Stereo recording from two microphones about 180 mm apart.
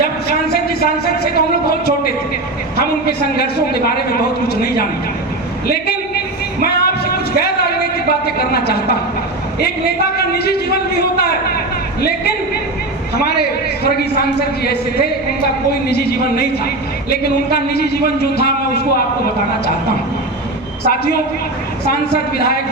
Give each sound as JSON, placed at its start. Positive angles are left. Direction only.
{"t": 0.3, "sound": "a sound", "side_deg": 60}
{"t": 2.7, "sound": "a man's voice", "side_deg": 60}
{"t": 5.7, "sound": "a sound", "side_deg": 60}
{"t": 8.4, "sound": "a man's voice", "side_deg": 60}
{"t": 10.3, "sound": "a man's voice", "side_deg": 60}
{"t": 13.8, "sound": "a man's voice", "side_deg": 60}
{"t": 15.9, "sound": "a man's voice", "side_deg": 60}
{"t": 20.8, "sound": "a man's voice", "side_deg": 60}
{"t": 22.4, "sound": "a man's voice", "side_deg": 60}